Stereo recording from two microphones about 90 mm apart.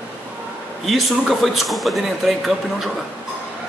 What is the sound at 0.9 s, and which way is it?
A man's voice, centre (ahead or behind).